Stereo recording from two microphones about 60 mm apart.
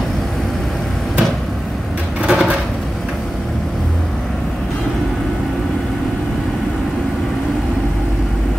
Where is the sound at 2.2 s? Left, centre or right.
Centre.